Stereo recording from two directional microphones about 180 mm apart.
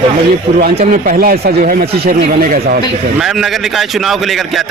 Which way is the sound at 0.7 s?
45° right (ahead or behind).